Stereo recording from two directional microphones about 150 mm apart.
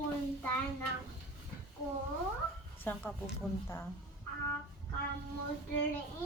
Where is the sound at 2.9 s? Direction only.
15° left (ahead or behind).